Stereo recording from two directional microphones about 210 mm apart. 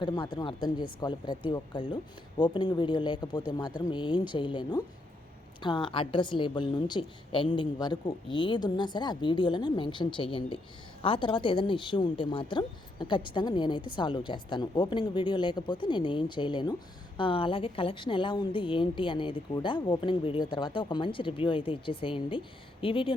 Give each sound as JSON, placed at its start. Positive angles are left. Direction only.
{"t": 0.0, "sound": "a woman's voice", "side_deg": 20}